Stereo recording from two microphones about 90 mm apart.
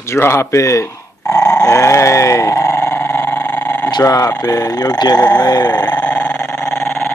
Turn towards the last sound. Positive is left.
turn(degrees=35)  # may be behind; listen again after turning